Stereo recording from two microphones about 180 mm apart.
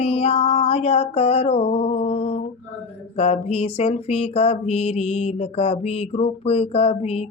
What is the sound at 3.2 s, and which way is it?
Mantra, 35° left (ahead or behind).